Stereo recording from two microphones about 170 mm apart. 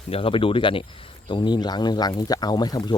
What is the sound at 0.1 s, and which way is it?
Speech, 30° left (ahead or behind).